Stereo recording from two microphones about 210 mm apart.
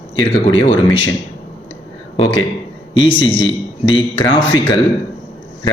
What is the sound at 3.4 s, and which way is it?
Speech, 20° left (ahead or behind).